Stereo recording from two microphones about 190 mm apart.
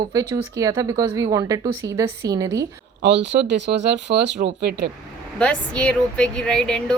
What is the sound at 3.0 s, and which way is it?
Speech, 70° right (ahead or behind).